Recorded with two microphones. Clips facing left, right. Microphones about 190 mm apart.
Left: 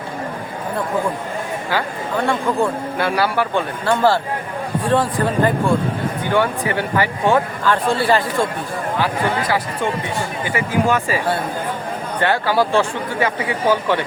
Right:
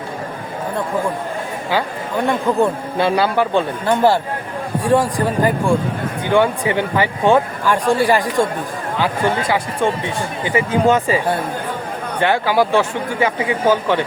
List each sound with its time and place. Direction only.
2.2 s speech: 20° right (ahead or behind)
10.4 s speech: 20° right (ahead or behind)